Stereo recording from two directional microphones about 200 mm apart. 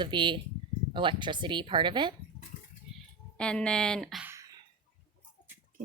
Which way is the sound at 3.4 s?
5° left (ahead or behind).